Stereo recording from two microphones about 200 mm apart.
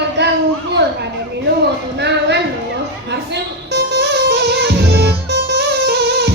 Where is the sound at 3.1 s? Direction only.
55° right (ahead or behind).